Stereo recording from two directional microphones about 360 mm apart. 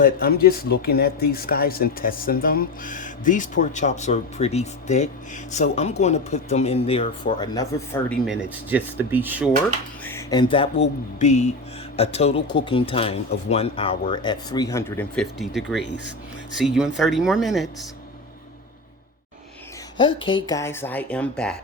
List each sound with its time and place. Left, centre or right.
0.0 s speech: left; by 9.5 s centre
10.0 s music: centre
11.2 s speech: centre
20.0 s speech: centre